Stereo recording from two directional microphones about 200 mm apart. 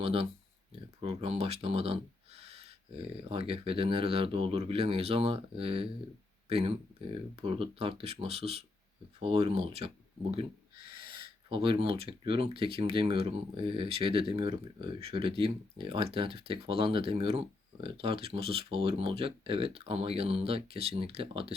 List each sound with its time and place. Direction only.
0.0 s speech: 30° right (ahead or behind)
11.4 s speech: 25° right (ahead or behind)